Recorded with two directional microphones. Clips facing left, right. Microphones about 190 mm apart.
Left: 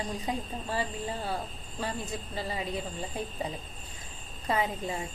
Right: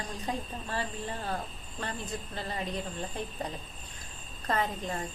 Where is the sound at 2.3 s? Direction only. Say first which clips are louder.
Left 2 dB; 10° left (ahead or behind).